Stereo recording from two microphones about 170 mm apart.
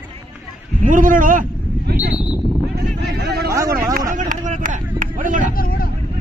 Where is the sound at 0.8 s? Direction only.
50° right (ahead or behind).